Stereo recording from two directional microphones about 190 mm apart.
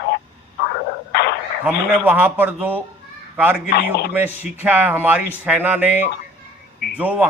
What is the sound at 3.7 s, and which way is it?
Speech, 60° left (ahead or behind).